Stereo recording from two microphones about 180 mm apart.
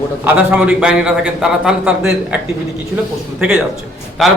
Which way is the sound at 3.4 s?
5° right (ahead or behind).